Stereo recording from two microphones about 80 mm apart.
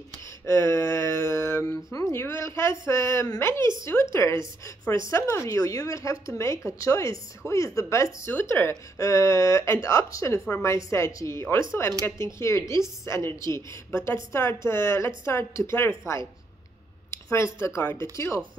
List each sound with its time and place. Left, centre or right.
0.5 s a sound: left
1.9 s speech: left
2.1 s a woman's voice: left
8.3 s a woman's voice: left